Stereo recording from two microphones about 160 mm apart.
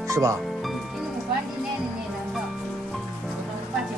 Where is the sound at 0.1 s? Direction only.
20° right (ahead or behind).